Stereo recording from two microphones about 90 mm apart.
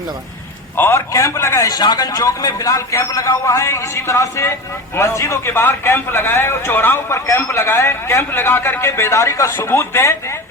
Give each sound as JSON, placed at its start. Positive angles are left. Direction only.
{"t": 0.8, "sound": "a man's voice", "side_deg": 30}
{"t": 1.7, "sound": "a man's voice", "side_deg": 50}